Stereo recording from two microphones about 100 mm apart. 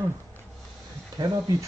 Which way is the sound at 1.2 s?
35° right (ahead or behind).